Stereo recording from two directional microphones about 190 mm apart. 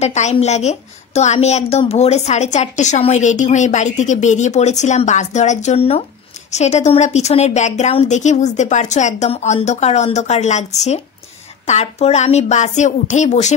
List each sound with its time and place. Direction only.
0.0 s a woman's voice: 35° left (ahead or behind)